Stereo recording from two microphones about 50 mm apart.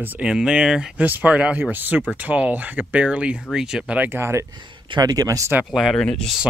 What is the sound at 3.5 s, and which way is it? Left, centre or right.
Speech, centre.